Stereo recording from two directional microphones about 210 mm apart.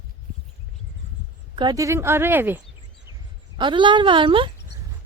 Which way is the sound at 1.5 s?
20° right (ahead or behind).